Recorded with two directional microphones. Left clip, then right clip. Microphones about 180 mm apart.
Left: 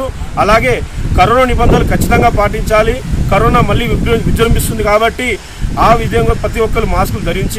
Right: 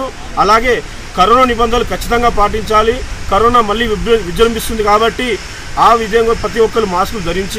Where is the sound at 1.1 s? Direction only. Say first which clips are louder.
Even; 25° left (ahead or behind).